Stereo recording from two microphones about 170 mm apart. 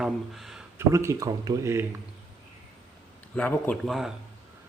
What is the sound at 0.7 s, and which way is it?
A man's voice, 15° right (ahead or behind).